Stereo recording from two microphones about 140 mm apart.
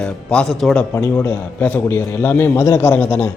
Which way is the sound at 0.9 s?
20° left (ahead or behind).